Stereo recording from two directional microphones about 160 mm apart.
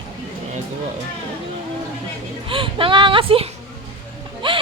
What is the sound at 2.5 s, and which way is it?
A woman's voice, 35° right (ahead or behind).